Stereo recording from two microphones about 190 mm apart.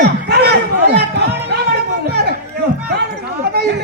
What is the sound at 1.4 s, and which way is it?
Music, 60° right (ahead or behind).